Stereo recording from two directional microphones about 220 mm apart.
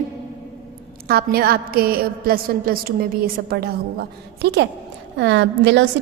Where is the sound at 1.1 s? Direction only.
45° right (ahead or behind).